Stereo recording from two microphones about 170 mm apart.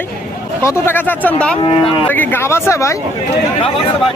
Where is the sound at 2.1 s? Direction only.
10° left (ahead or behind).